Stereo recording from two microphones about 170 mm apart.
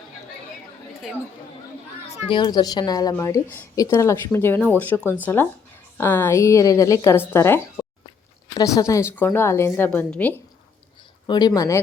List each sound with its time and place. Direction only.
1.0 s speech: 5° right (ahead or behind)
2.3 s a woman's voice: 25° left (ahead or behind); by 10.4 s 10° left (ahead or behind)
11.3 s speech: 25° left (ahead or behind)